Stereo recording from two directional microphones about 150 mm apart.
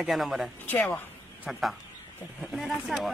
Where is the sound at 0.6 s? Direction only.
10° left (ahead or behind).